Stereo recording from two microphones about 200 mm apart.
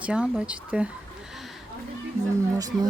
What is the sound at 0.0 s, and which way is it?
Speech, 5° right (ahead or behind).